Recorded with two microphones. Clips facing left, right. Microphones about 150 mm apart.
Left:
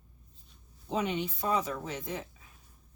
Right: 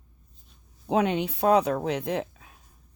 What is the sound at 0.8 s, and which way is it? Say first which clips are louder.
Speech: right 7 dB; 65° right (ahead or behind).